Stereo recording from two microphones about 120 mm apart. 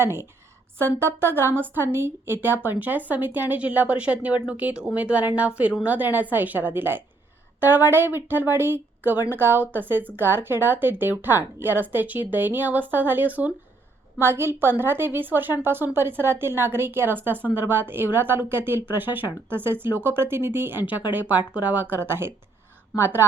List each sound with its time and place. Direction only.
0.0 s a woman's voice: 20° right (ahead or behind)